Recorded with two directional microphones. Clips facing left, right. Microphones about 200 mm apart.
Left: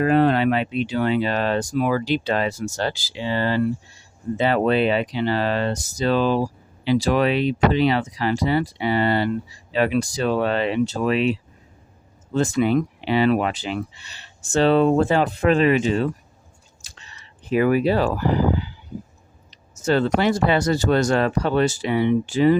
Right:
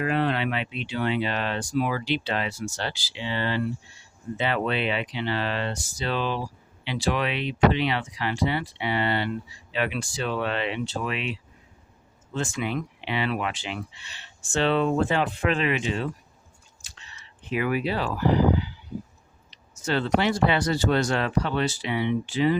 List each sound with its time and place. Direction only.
0.0 s speech: 40° left (ahead or behind)
16.8 s a sound: 40° left (ahead or behind)
19.5 s speech: 45° left (ahead or behind)